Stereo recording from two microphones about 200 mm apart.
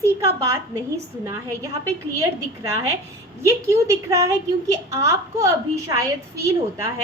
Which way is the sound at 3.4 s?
15° right (ahead or behind).